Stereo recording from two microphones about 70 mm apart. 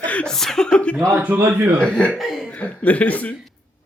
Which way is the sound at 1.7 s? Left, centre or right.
Centre.